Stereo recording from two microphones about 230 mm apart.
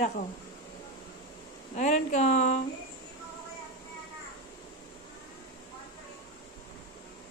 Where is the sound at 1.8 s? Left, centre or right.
Left.